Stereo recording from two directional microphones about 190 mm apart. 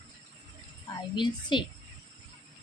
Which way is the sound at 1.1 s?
25° left (ahead or behind).